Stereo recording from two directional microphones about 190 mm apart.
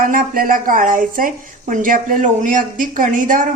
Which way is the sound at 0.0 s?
45° right (ahead or behind).